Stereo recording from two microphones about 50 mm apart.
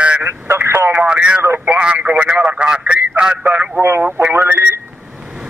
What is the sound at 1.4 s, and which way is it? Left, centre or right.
Speech, right.